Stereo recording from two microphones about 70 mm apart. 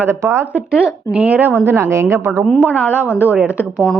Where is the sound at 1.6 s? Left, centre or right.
Right.